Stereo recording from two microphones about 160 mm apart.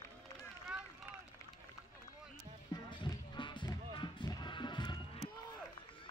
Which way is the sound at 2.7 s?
30° left (ahead or behind).